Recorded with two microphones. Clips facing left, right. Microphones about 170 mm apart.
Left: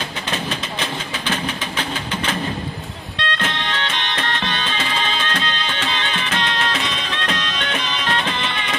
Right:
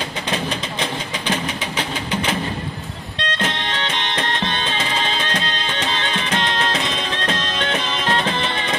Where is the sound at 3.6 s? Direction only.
20° right (ahead or behind).